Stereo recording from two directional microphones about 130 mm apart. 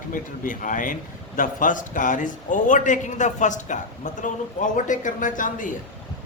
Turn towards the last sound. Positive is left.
turn(degrees=90)